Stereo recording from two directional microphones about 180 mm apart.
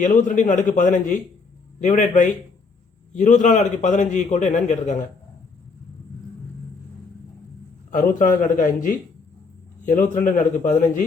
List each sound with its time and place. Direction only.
0.0 s a man's voice: 45° left (ahead or behind)
7.9 s a man's voice: 45° left (ahead or behind)